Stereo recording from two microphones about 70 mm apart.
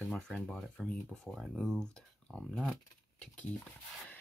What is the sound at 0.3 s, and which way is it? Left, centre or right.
Speech, centre.